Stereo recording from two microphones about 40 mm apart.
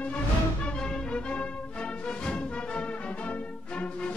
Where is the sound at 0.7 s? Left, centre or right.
Centre.